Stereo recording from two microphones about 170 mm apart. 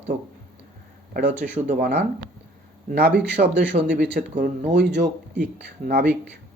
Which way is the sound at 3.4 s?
85° right.